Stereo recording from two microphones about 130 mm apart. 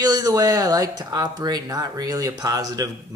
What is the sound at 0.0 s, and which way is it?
Speech, 30° right (ahead or behind).